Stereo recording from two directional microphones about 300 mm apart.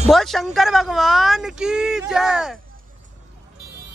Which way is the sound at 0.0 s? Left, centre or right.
Centre.